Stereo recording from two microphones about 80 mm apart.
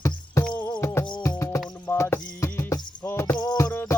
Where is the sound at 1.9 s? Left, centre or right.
Left.